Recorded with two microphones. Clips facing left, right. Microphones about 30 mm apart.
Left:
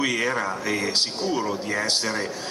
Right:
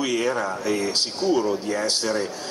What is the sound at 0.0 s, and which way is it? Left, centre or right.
A man's voice, centre.